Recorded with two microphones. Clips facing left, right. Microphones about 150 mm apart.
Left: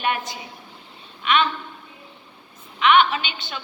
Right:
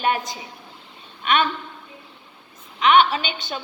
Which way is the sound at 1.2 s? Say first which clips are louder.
Even; 45° right (ahead or behind).